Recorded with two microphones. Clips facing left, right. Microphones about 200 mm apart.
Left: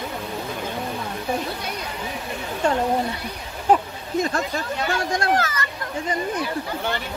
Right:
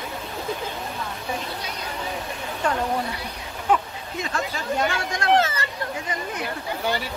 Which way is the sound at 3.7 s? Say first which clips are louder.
Left 4 dB; 40° left (ahead or behind).